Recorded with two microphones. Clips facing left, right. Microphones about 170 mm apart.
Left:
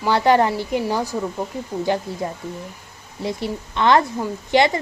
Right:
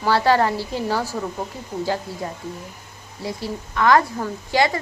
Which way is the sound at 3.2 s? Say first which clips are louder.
Left 3 dB; 25° left (ahead or behind).